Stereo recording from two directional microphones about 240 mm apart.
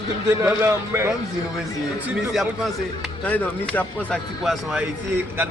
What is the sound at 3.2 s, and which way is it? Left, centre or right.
A man's voice, centre.